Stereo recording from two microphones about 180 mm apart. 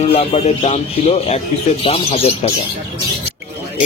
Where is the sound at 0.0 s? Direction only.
35° left (ahead or behind).